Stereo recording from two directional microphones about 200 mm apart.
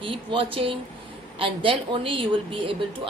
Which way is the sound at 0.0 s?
25° right (ahead or behind).